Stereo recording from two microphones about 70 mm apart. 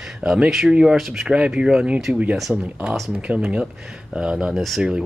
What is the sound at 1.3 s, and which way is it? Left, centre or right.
Speech, centre.